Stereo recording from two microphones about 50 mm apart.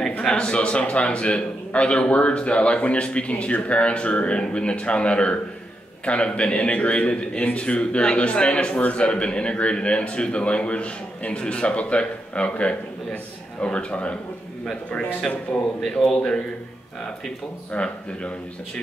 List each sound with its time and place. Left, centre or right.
0.2 s a man's voice: centre
15.3 s a man's voice: centre
17.7 s a man's voice: left